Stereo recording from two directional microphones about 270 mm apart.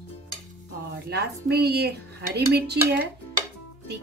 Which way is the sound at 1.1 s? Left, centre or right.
Right.